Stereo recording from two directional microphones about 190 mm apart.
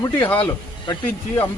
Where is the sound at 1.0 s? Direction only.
10° left (ahead or behind).